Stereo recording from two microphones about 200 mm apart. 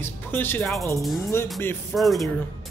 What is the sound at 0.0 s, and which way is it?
Speech, 10° left (ahead or behind).